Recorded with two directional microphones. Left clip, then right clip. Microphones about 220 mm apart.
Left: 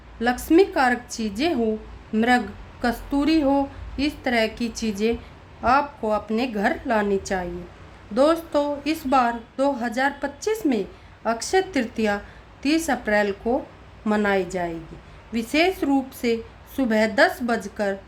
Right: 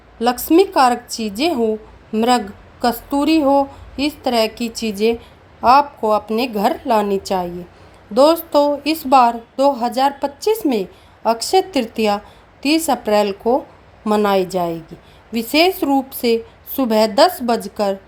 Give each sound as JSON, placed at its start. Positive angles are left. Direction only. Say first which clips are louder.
{"t": 0.4, "sound": "a woman's voice", "louder": "right 5 dB", "side_deg": -20}